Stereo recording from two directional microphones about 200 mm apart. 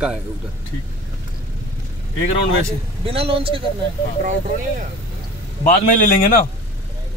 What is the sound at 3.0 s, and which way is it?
Speech, 30° right (ahead or behind).